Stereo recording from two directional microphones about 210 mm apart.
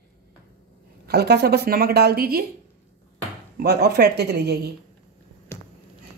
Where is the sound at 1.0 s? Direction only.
50° right (ahead or behind).